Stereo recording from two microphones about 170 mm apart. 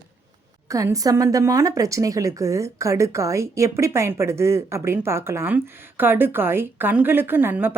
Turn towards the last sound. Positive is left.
turn(degrees=-10)  # may be behind; listen again after turning